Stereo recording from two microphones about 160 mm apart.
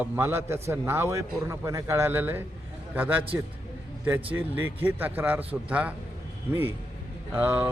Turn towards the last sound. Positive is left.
turn(degrees=-10)  # may be behind; listen again after turning